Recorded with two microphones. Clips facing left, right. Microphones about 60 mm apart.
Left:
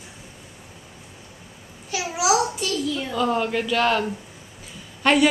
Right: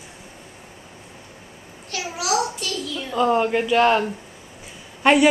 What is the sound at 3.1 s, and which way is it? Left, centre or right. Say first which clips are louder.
Speech: right 5 dB; centre.